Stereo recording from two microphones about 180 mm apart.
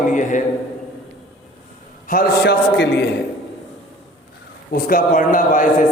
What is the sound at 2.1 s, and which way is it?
Speech, 60° left (ahead or behind).